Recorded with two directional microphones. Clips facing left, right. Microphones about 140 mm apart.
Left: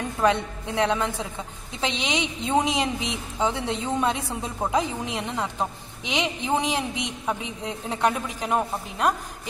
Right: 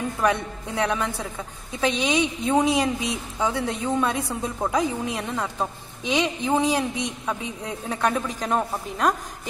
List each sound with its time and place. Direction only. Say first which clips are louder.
0.2 s a woman's voice: left 2 dB; 20° left (ahead or behind)